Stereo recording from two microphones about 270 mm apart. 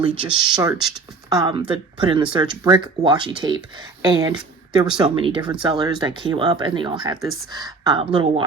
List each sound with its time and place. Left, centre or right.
0.0 s speech: centre